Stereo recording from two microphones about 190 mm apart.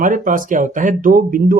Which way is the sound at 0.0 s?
45° right (ahead or behind).